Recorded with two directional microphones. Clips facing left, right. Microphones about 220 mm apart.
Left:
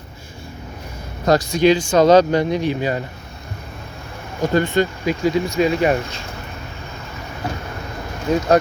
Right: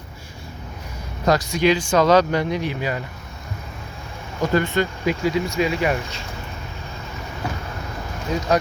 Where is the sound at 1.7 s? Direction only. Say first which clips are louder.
Left 4 dB; 25° left (ahead or behind).